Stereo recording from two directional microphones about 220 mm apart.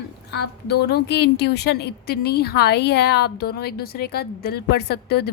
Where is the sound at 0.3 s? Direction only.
50° left (ahead or behind).